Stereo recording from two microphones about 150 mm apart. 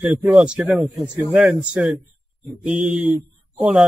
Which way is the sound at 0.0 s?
5° right (ahead or behind).